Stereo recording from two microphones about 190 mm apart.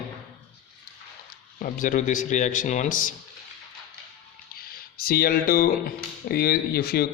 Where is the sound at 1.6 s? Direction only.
45° left (ahead or behind).